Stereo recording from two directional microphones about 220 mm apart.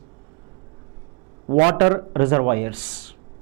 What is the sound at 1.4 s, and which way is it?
Speech, 30° right (ahead or behind).